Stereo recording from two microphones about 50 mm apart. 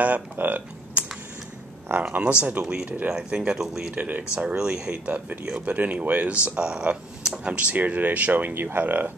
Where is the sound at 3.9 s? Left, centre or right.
Right.